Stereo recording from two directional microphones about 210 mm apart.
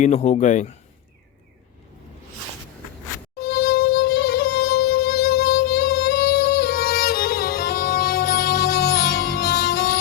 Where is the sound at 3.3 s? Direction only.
50° left (ahead or behind).